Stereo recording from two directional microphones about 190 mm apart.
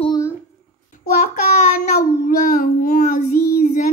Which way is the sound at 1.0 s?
40° left (ahead or behind).